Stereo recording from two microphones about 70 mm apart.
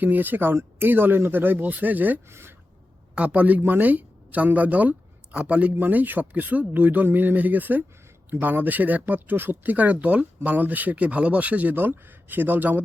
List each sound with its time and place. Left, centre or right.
0.0 s speech: right
3.2 s a woman's voice: right